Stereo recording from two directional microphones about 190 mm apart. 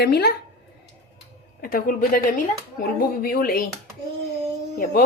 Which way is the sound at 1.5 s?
50° left (ahead or behind).